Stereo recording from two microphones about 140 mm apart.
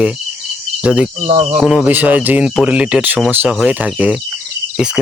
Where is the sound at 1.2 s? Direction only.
45° right (ahead or behind).